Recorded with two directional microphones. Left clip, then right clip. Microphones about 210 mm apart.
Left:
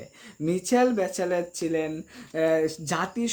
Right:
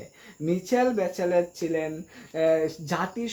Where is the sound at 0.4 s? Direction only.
40° left (ahead or behind).